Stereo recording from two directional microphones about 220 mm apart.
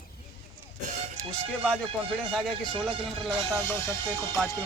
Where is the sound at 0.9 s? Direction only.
35° right (ahead or behind).